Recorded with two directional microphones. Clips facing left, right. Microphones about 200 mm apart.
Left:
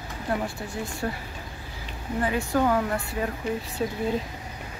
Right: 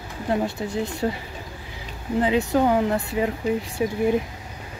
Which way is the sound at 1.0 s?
20° right (ahead or behind).